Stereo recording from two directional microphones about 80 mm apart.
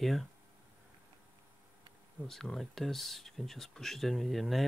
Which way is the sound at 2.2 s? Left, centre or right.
Centre.